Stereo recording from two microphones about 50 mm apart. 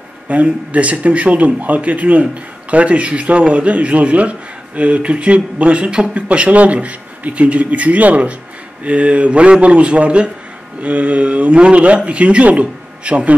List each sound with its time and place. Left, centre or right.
0.3 s speech: right